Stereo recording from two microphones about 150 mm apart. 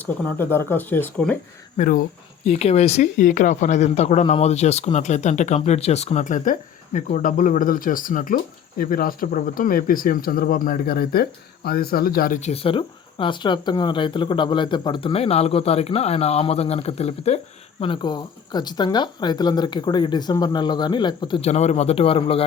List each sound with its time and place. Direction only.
0.0 s speech: 15° left (ahead or behind)
1.7 s speech: 65° left (ahead or behind)
2.5 s speech: 45° left (ahead or behind); by 12.4 s 75° left (ahead or behind)
12.4 s speech: 45° left (ahead or behind)
21.4 s speech: 45° left (ahead or behind)